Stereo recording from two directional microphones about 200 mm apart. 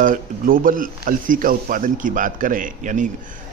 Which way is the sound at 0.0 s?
45° right (ahead or behind).